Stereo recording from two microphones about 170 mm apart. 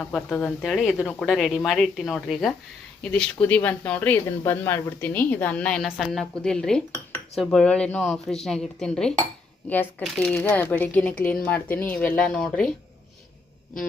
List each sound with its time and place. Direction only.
0.0 s a woman's voice: centre (ahead or behind)